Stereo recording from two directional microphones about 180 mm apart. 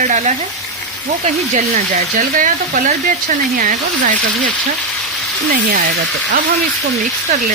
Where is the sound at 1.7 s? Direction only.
50° right (ahead or behind).